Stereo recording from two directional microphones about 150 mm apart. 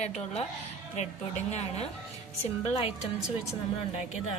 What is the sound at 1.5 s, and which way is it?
A woman's voice, 45° left (ahead or behind).